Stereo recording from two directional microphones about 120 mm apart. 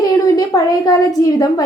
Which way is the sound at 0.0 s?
30° left (ahead or behind).